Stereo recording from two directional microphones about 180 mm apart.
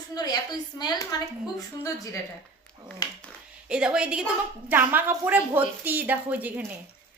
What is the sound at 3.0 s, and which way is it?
Dog, 20° left (ahead or behind).